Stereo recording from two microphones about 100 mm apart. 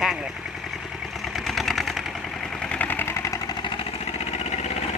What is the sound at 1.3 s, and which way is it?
Engine, centre (ahead or behind).